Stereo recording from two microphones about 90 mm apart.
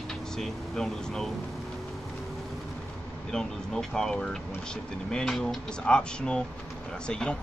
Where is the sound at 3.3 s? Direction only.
5° left (ahead or behind).